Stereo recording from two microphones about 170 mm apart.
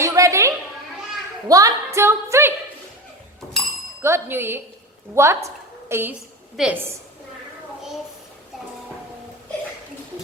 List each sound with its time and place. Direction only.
0.0 s a sound: 20° right (ahead or behind)
1.5 s a woman's voice: 20° right (ahead or behind)
4.0 s a woman's voice: 15° right (ahead or behind)